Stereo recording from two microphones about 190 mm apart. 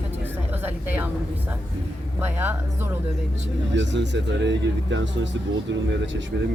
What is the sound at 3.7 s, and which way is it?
Speech, 70° right (ahead or behind).